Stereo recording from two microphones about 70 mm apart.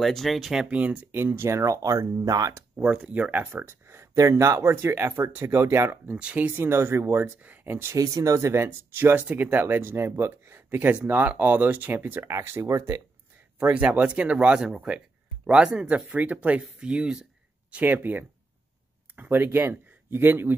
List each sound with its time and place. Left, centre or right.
0.0 s speech: centre
0.7 s speech: centre
1.1 s speech: right
2.8 s speech: centre
3.1 s speech: right
6.0 s speech: centre
6.5 s speech: right
7.4 s speech: right
7.9 s speech: right
8.9 s speech: right
13.6 s a man's voice: right